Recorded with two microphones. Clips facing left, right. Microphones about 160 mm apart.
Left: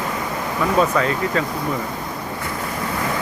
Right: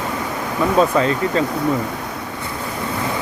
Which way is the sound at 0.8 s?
30° right (ahead or behind).